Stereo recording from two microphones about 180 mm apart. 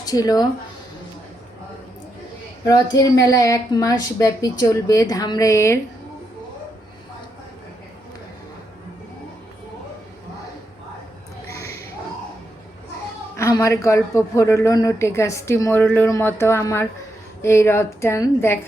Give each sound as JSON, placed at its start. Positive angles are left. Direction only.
{"t": 0.0, "sound": "speech", "side_deg": 20}
{"t": 2.9, "sound": "a woman's voice", "side_deg": 20}
{"t": 11.4, "sound": "a sound", "side_deg": 15}
{"t": 13.3, "sound": "speech", "side_deg": 15}